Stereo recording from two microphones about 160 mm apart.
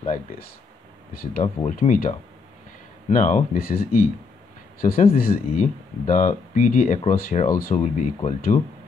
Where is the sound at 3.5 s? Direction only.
70° left (ahead or behind).